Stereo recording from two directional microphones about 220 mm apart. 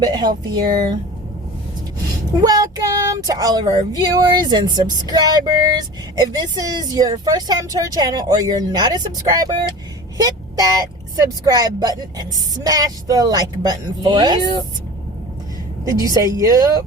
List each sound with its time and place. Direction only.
0.0 s speech: 20° right (ahead or behind)
2.4 s child singing: 15° right (ahead or behind)
15.8 s child singing: 15° right (ahead or behind)